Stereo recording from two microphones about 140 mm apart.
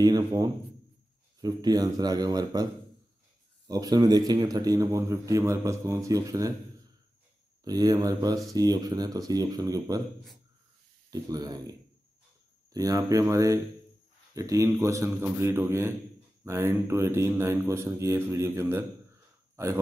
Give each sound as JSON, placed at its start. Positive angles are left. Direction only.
{"t": 0.0, "sound": "a man's voice", "side_deg": -25}
{"t": 7.6, "sound": "a man's voice", "side_deg": -25}
{"t": 11.1, "sound": "a man's voice", "side_deg": -25}
{"t": 12.7, "sound": "a man's voice", "side_deg": -25}